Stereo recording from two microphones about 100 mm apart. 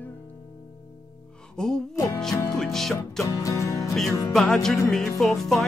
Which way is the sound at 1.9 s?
35° left (ahead or behind).